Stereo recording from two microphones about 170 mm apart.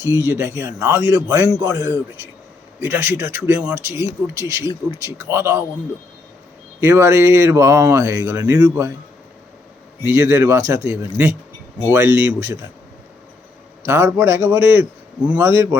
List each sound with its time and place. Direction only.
0.0 s speech: 20° right (ahead or behind)
6.7 s speech: 15° right (ahead or behind)
10.0 s speech: 15° right (ahead or behind)
11.9 s speech: 15° right (ahead or behind)
13.8 s speech: 15° right (ahead or behind)